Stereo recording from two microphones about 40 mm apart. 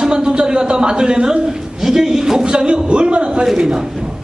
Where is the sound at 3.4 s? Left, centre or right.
Centre.